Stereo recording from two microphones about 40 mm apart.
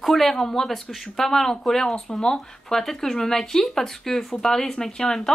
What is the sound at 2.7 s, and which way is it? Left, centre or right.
Speech, centre.